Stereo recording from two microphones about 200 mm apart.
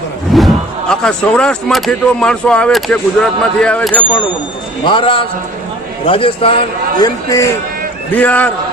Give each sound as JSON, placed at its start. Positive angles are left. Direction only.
{"t": 0.3, "sound": "speech", "side_deg": 0}
{"t": 4.9, "sound": "a man's voice", "side_deg": 25}
{"t": 7.0, "sound": "a man's voice", "side_deg": 15}